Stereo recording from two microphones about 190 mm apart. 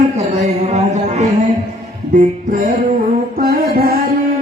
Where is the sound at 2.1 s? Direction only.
45° right (ahead or behind).